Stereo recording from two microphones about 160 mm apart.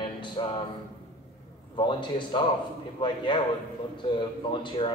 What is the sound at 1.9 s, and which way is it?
A man's voice, 30° left (ahead or behind).